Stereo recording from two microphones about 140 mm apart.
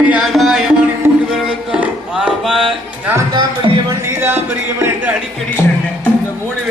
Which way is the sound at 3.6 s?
35° right (ahead or behind).